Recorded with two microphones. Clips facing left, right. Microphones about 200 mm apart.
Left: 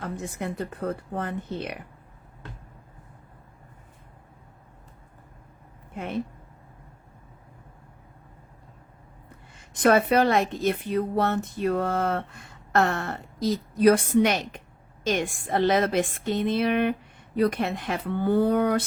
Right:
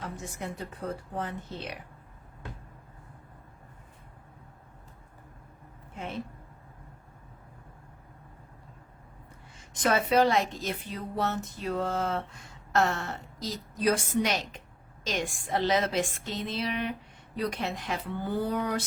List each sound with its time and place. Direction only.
0.0 s speech: 55° left (ahead or behind)
9.6 s speech: 55° left (ahead or behind)